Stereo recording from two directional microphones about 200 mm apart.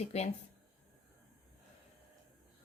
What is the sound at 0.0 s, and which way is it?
Speech, 35° left (ahead or behind).